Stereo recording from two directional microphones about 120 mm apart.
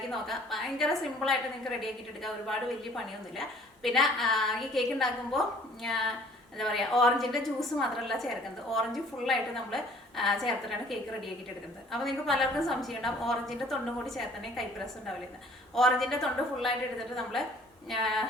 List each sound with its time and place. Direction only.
0.1 s a woman's voice: centre (ahead or behind)
15.7 s a woman's voice: centre (ahead or behind)
17.8 s a woman's voice: centre (ahead or behind)